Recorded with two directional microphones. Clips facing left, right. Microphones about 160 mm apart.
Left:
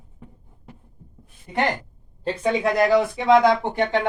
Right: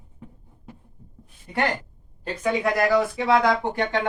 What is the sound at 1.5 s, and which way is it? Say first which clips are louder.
Speech: left 2 dB; 20° left (ahead or behind).